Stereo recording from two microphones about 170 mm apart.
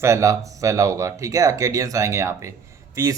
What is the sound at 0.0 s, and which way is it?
A man's voice, 15° right (ahead or behind).